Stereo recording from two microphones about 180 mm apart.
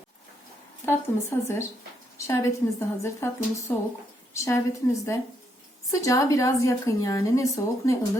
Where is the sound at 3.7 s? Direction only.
10° left (ahead or behind).